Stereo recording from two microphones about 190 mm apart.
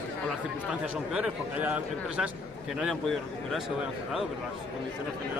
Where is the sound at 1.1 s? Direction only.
5° right (ahead or behind).